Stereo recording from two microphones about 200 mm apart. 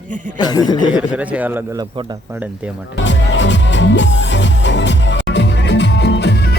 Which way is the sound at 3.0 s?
65° left (ahead or behind).